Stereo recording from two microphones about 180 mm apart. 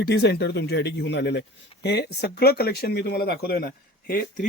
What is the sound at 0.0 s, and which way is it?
A man's voice, 65° left (ahead or behind).